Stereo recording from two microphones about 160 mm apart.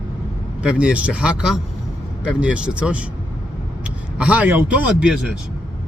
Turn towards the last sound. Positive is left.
turn(degrees=-5)  # may be behind; listen again after turning